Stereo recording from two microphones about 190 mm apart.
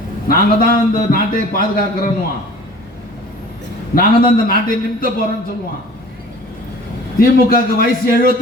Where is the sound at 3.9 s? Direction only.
50° left (ahead or behind).